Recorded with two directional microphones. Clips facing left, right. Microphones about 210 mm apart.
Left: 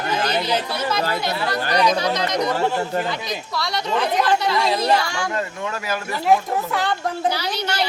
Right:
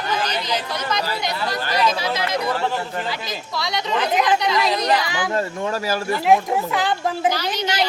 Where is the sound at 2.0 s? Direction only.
5° right (ahead or behind).